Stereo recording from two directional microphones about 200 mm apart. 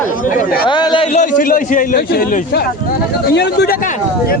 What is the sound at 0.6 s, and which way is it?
Speech, 20° left (ahead or behind).